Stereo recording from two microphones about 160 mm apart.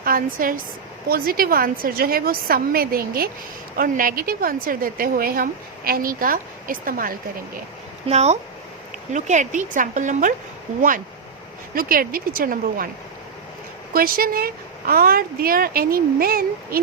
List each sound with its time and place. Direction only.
0.0 s a woman's voice: 60° right (ahead or behind)
8.0 s speech: 40° right (ahead or behind)
11.7 s a woman's voice: 60° right (ahead or behind)
13.9 s a woman's voice: 65° right (ahead or behind)